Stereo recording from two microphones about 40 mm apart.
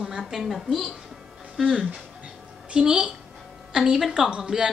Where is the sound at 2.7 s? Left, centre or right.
Right.